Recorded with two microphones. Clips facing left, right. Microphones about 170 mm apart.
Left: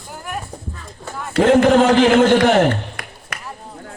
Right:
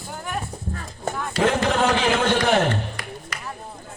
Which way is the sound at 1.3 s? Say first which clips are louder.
Left 9 dB; 55° left (ahead or behind).